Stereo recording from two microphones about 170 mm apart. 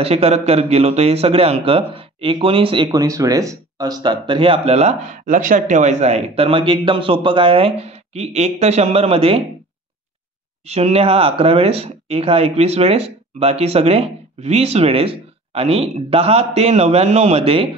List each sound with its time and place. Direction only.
0.0 s a man's voice: 35° right (ahead or behind)
10.7 s a man's voice: 35° right (ahead or behind)